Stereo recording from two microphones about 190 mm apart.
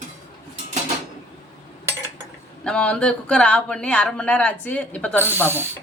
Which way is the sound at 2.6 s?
5° left (ahead or behind).